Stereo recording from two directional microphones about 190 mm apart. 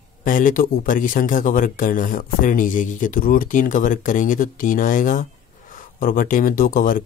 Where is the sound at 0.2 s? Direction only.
45° left (ahead or behind).